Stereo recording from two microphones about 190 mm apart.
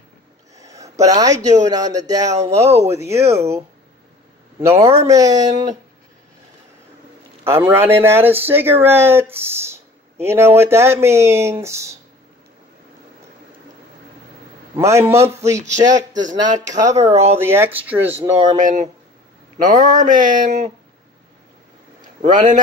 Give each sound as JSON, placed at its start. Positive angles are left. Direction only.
{"t": 0.6, "sound": "speech", "side_deg": -15}
{"t": 4.6, "sound": "speech", "side_deg": -15}
{"t": 7.4, "sound": "speech", "side_deg": -10}
{"t": 14.8, "sound": "speech", "side_deg": -15}
{"t": 16.1, "sound": "speech", "side_deg": -40}
{"t": 16.3, "sound": "speech", "side_deg": -20}
{"t": 16.9, "sound": "a sound", "side_deg": -35}
{"t": 17.4, "sound": "speech", "side_deg": -10}
{"t": 18.5, "sound": "a sound", "side_deg": -40}
{"t": 22.0, "sound": "a man's voice", "side_deg": -40}